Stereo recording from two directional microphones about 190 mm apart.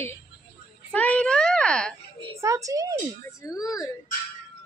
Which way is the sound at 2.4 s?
15° right (ahead or behind).